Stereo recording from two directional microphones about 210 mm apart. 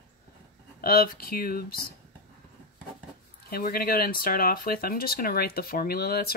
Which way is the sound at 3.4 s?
45° left (ahead or behind).